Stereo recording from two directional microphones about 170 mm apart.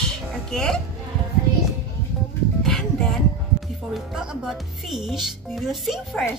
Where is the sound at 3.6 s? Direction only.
Centre (ahead or behind).